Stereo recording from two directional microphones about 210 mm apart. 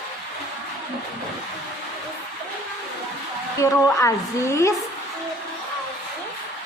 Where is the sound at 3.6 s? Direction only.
15° left (ahead or behind).